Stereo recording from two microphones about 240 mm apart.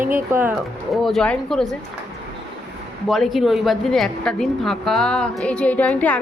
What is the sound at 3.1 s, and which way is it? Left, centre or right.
A woman's voice, centre.